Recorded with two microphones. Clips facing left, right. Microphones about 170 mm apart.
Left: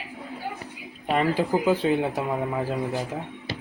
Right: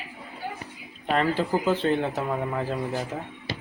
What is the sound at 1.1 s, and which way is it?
Speech, 10° left (ahead or behind).